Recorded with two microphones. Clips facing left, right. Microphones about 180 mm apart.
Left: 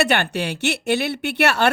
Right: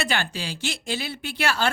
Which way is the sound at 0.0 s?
65° left (ahead or behind).